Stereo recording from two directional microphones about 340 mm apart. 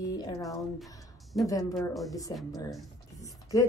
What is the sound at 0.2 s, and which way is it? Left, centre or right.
Speech, centre.